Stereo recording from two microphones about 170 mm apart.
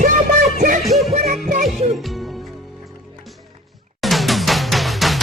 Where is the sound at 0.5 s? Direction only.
50° right (ahead or behind).